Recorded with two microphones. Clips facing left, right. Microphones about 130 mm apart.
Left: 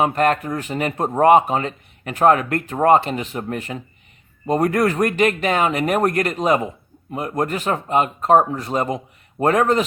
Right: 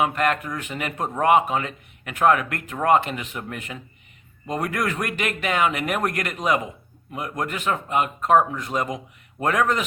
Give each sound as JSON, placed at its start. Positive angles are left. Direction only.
{"t": 0.0, "sound": "speech", "side_deg": 35}